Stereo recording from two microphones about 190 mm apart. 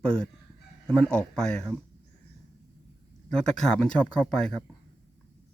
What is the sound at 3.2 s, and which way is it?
A man's voice, 5° left (ahead or behind).